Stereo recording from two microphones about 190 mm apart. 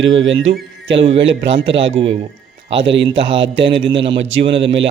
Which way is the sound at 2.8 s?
75° right (ahead or behind).